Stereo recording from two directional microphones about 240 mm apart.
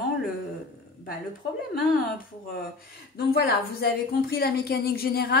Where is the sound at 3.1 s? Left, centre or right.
Left.